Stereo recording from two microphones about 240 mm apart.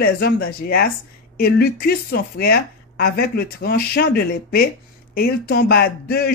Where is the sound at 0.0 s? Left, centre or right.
Left.